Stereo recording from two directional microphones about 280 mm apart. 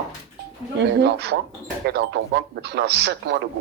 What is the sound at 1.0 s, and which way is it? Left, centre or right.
A man's voice, right.